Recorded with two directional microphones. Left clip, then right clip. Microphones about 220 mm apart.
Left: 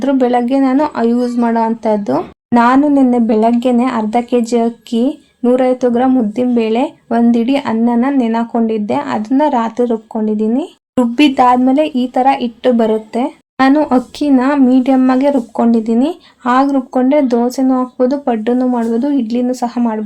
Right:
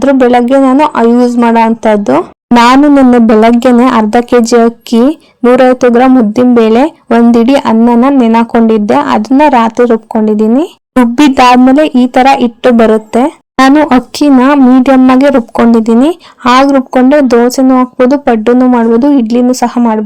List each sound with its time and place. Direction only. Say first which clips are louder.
0.0 s speech: right 7 dB; 30° right (ahead or behind)